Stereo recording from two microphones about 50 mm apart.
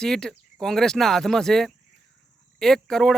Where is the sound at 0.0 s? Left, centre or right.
Centre.